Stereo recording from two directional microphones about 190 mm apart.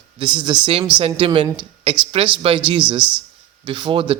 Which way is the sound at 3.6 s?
25° right (ahead or behind).